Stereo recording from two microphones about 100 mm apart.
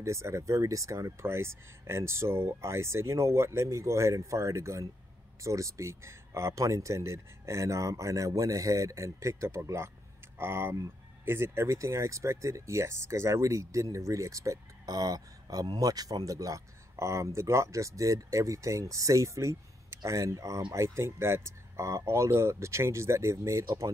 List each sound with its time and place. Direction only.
0.0 s speech: 30° right (ahead or behind)